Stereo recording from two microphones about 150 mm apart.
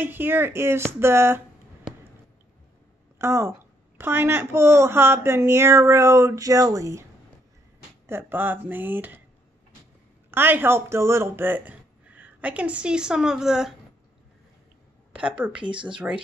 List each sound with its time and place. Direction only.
0.0 s speech: 15° right (ahead or behind)
3.2 s a woman's voice: 15° right (ahead or behind)
8.1 s speech: 15° right (ahead or behind)
10.3 s speech: 15° right (ahead or behind)
15.1 s speech: 10° right (ahead or behind)